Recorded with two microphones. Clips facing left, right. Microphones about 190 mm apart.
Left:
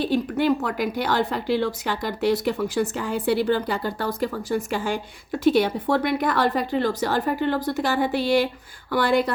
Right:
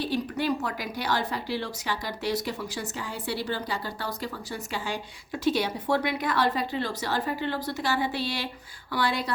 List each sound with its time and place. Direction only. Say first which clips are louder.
0.0 s a woman's voice: left 6 dB; 55° left (ahead or behind)